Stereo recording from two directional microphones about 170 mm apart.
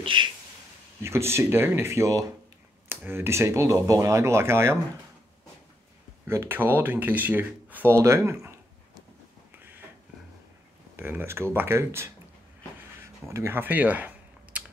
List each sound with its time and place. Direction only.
0.0 s a sound: 30° right (ahead or behind)
1.0 s speech: 15° right (ahead or behind)
6.2 s speech: 15° right (ahead or behind)
11.0 s speech: 15° right (ahead or behind)
13.3 s speech: 15° right (ahead or behind)